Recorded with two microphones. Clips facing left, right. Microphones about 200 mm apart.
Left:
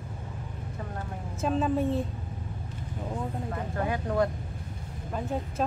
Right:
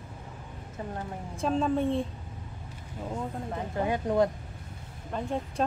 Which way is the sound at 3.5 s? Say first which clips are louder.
Right 3 dB; 20° right (ahead or behind).